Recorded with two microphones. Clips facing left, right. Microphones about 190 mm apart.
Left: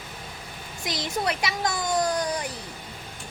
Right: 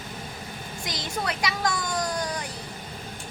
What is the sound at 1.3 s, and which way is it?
Speech, 25° left (ahead or behind).